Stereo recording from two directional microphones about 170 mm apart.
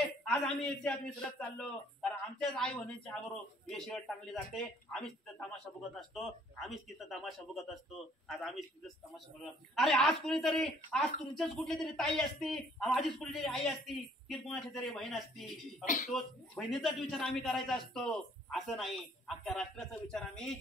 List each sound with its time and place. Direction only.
0.0 s a man's voice: 5° left (ahead or behind)
15.8 s speech: 50° left (ahead or behind)
16.1 s a man's voice: centre (ahead or behind)